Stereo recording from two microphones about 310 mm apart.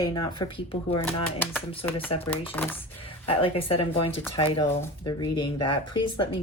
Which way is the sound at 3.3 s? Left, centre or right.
Centre.